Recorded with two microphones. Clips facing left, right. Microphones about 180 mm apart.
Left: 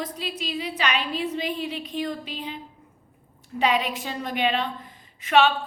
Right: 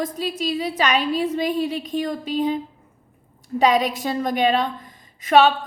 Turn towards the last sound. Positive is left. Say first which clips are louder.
# right 4 dB
turn(degrees=-40)  # may be behind; listen again after turning